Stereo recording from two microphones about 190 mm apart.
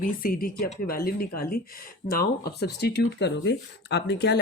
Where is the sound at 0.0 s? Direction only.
50° left (ahead or behind).